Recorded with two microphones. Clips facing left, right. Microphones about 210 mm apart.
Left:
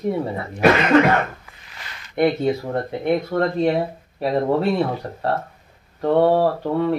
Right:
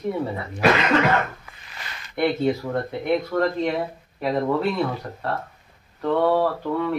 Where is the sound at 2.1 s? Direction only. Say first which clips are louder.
Left 3 dB; 35° left (ahead or behind).